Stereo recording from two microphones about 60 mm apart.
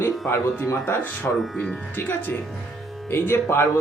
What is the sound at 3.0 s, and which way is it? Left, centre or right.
Speech, left.